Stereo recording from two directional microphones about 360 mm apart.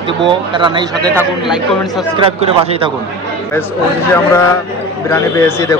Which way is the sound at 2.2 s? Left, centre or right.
Centre.